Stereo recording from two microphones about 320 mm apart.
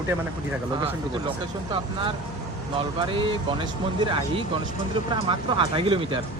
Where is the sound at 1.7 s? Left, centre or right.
Centre.